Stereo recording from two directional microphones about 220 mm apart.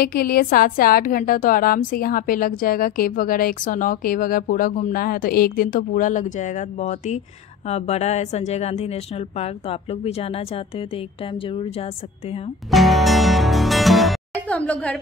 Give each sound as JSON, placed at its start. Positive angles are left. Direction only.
{"t": 0.0, "sound": "a woman's voice", "side_deg": 45}
{"t": 12.7, "sound": "music", "side_deg": 0}